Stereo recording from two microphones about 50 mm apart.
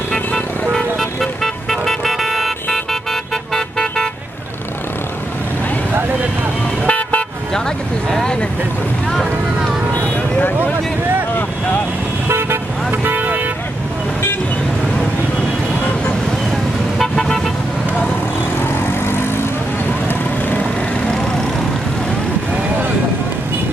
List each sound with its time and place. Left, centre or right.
0.7 s vehicle: centre
6.9 s toot: left
8.1 s vehicle: centre
12.3 s vehicle: right
17.0 s vehicle: centre